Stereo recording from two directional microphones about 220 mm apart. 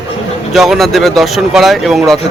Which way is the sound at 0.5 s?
Centre (ahead or behind).